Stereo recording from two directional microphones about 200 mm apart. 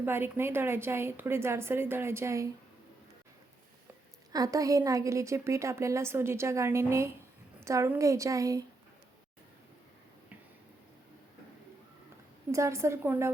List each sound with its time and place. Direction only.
0.0 s a woman's voice: 10° right (ahead or behind)
4.3 s a woman's voice: 20° right (ahead or behind)
12.5 s a woman's voice: 15° right (ahead or behind)